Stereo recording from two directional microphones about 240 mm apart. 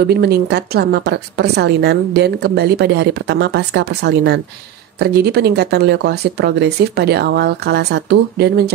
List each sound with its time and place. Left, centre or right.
0.1 s a woman's voice: right